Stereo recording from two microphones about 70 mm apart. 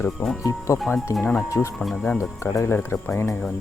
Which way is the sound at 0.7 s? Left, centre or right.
Left.